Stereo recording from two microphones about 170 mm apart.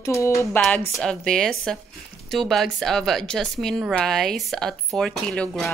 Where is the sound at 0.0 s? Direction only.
15° left (ahead or behind).